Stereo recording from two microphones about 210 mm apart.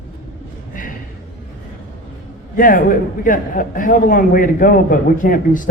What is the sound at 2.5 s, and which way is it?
A man's voice, 40° left (ahead or behind).